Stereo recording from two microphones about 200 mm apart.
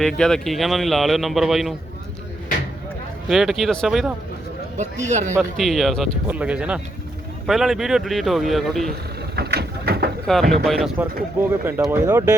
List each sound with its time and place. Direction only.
0.0 s a man's voice: 5° left (ahead or behind)
3.2 s a man's voice: centre (ahead or behind)
4.8 s a man's voice: 35° right (ahead or behind)
5.4 s a man's voice: centre (ahead or behind)
9.3 s a sound: 55° right (ahead or behind)
10.5 s a man's voice: centre (ahead or behind)
11.3 s speech: 10° right (ahead or behind)